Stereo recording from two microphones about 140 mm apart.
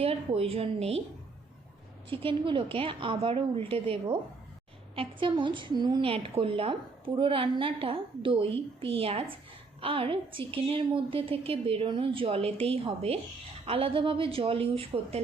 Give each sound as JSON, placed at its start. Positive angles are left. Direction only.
{"t": 0.0, "sound": "a woman's voice", "side_deg": -40}
{"t": 2.0, "sound": "a woman's voice", "side_deg": -40}